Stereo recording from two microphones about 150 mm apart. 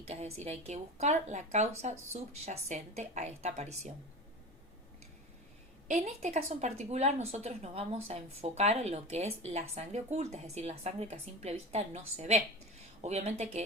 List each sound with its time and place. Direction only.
0.0 s speech: 45° right (ahead or behind)
5.9 s speech: 55° right (ahead or behind)